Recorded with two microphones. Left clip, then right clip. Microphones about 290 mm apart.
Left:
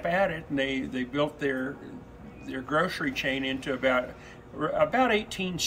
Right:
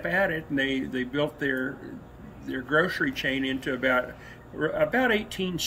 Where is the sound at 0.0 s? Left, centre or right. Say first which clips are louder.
Right 1 dB; left.